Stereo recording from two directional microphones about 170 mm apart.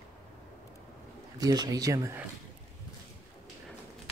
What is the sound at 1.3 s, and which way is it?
Speech, 20° right (ahead or behind).